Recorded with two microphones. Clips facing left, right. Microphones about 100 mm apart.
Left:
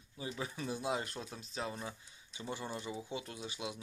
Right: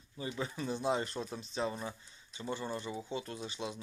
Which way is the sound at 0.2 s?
5° left (ahead or behind).